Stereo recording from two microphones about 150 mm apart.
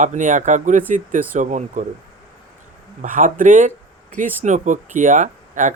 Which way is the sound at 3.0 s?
60° right (ahead or behind).